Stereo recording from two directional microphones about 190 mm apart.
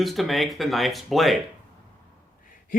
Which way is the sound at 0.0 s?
Centre (ahead or behind).